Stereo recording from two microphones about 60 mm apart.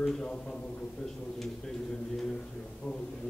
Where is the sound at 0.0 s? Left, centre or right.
Centre.